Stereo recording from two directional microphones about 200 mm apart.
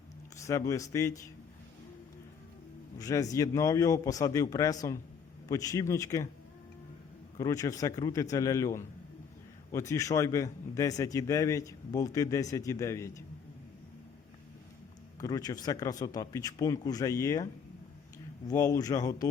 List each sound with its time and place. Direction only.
0.3 s a man's voice: 15° left (ahead or behind)
3.0 s a man's voice: 15° left (ahead or behind)
7.3 s a man's voice: 15° left (ahead or behind)
15.2 s speech: 20° left (ahead or behind)